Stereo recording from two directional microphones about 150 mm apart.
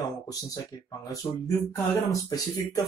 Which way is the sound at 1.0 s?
20° left (ahead or behind).